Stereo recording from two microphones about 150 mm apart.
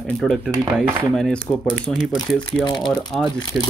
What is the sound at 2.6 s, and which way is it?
Speech, 30° left (ahead or behind).